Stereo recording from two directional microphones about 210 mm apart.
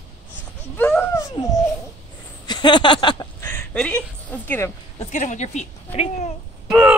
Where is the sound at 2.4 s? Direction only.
20° left (ahead or behind).